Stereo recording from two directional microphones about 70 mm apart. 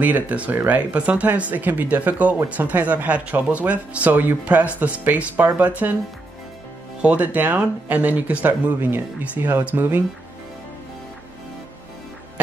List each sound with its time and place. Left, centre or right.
0.0 s speech: right
7.0 s speech: right